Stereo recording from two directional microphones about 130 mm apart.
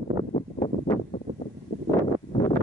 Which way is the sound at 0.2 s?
50° left (ahead or behind).